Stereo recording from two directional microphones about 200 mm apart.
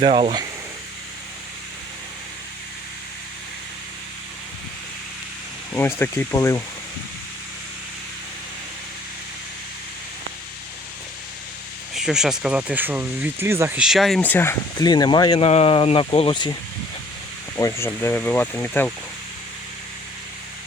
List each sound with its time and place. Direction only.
0.0 s speech: 25° right (ahead or behind)
5.7 s speech: 10° left (ahead or behind)
11.9 s speech: centre (ahead or behind); by 16.6 s 25° left (ahead or behind)
17.6 s speech: 15° left (ahead or behind)